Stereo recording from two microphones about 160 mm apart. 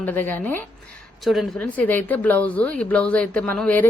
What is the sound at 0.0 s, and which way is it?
Speech, 15° left (ahead or behind).